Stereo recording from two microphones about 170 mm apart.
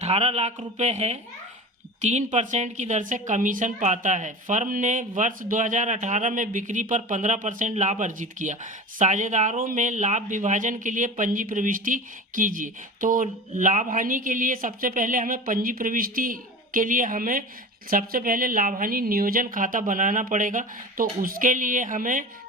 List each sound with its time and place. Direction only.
0.0 s a woman's voice: 35° right (ahead or behind)